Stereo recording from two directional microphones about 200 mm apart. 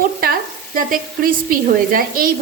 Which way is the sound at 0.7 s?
45° right (ahead or behind).